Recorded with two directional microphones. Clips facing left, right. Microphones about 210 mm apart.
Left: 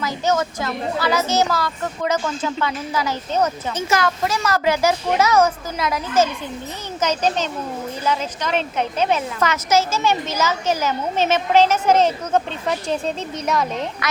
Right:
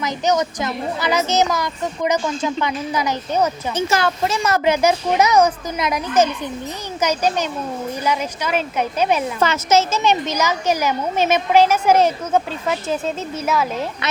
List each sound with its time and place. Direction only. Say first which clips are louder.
0.0 s speech: right 1 dB; 20° right (ahead or behind)
3.8 s a child's voice: right 1 dB; 30° right (ahead or behind); by 9.2 s 10° right (ahead or behind)
9.4 s speech: right 2 dB; 25° right (ahead or behind); by 13.8 s 5° right (ahead or behind)